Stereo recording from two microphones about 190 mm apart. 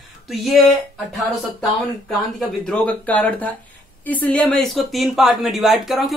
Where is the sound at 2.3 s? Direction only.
5° left (ahead or behind).